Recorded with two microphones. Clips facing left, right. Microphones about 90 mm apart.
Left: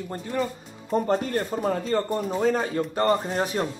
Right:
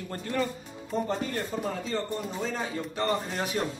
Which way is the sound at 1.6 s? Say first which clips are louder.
Left 7 dB; 45° left (ahead or behind).